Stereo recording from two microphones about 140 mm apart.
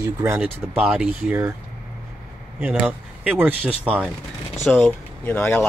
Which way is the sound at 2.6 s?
10° right (ahead or behind).